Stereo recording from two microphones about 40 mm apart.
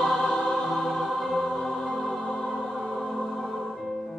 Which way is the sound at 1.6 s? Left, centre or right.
Centre.